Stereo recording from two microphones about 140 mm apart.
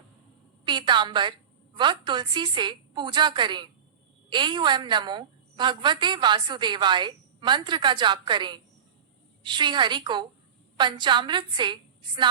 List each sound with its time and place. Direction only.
0.6 s a woman's voice: 35° right (ahead or behind)